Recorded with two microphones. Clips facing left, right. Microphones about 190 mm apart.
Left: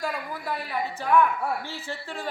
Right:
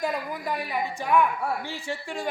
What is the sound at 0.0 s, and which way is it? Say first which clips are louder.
A woman's voice: right 3 dB; 20° right (ahead or behind).